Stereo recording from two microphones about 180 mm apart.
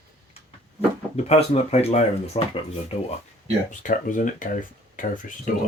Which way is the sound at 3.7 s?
45° left (ahead or behind).